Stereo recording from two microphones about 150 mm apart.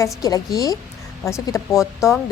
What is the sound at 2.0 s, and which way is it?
Speech, 20° left (ahead or behind).